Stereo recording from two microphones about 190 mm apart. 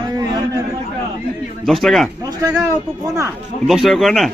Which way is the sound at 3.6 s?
Centre (ahead or behind).